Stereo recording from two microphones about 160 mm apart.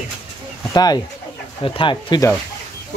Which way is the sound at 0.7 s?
25° left (ahead or behind).